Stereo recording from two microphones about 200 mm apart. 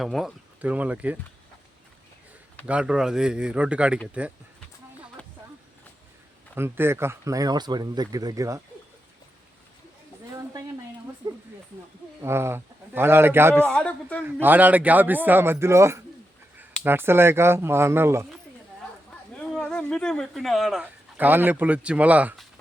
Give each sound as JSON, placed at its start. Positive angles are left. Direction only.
{"t": 0.0, "sound": "speech", "side_deg": 0}
{"t": 2.6, "sound": "speech", "side_deg": -5}
{"t": 5.2, "sound": "a sound", "side_deg": 5}
{"t": 6.6, "sound": "speech", "side_deg": -10}
{"t": 11.2, "sound": "a sound", "side_deg": -20}
{"t": 12.2, "sound": "speech", "side_deg": -15}
{"t": 13.7, "sound": "speech", "side_deg": 5}
{"t": 14.4, "sound": "speech", "side_deg": -10}
{"t": 19.5, "sound": "speech", "side_deg": 5}